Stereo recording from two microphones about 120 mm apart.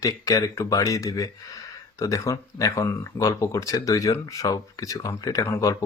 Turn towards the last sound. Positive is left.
turn(degrees=25)  # may be behind; listen again after turning